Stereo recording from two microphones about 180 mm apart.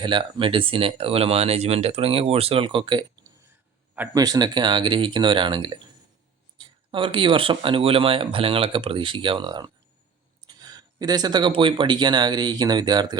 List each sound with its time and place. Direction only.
0.0 s speech: 25° right (ahead or behind)
3.9 s a man's voice: 10° right (ahead or behind)
4.2 s speech: 25° right (ahead or behind)